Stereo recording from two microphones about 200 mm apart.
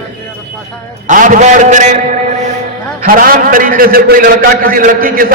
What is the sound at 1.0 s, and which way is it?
Speech, 40° right (ahead or behind).